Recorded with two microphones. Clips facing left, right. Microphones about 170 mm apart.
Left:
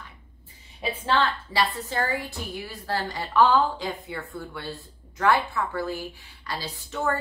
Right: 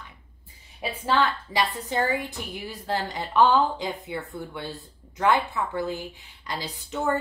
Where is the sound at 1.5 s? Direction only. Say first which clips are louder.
Even; 20° right (ahead or behind).